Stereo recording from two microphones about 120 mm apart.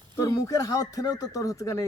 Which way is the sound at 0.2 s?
30° left (ahead or behind).